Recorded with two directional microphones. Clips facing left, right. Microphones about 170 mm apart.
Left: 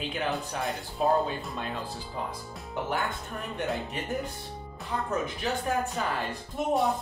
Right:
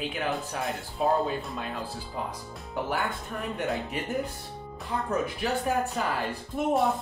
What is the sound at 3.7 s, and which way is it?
Speech, centre (ahead or behind).